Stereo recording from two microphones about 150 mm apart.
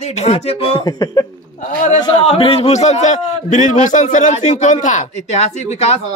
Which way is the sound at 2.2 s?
40° left (ahead or behind).